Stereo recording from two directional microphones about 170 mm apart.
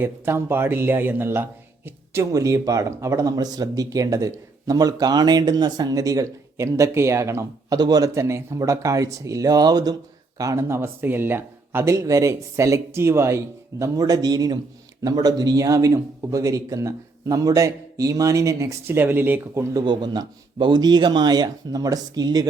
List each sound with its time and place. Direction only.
0.0 s a man's voice: 15° right (ahead or behind)
19.8 s a man's voice: 25° right (ahead or behind)